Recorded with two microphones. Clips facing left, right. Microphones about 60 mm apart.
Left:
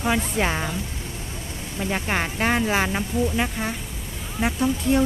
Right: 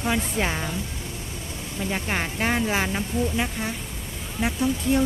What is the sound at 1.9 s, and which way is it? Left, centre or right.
Speech, left.